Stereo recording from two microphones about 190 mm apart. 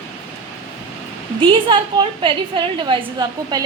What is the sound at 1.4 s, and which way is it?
A woman's voice, 25° right (ahead or behind).